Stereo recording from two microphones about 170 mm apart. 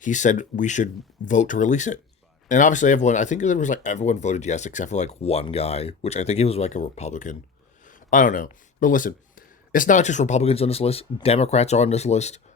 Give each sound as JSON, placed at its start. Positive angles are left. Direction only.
{"t": 0.0, "sound": "speech", "side_deg": 45}